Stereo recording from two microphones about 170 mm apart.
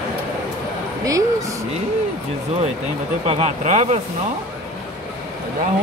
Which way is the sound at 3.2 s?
35° right (ahead or behind).